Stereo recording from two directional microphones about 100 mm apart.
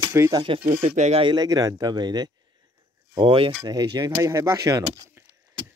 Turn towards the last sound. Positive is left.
turn(degrees=-35)  # may be behind; listen again after turning